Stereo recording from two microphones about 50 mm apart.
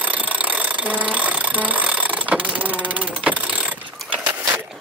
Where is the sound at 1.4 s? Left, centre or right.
Right.